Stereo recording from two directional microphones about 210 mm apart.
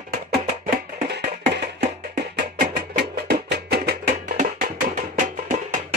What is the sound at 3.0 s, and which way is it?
Music, 50° right (ahead or behind).